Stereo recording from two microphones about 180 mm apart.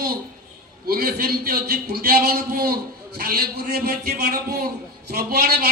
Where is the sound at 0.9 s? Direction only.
60° right (ahead or behind).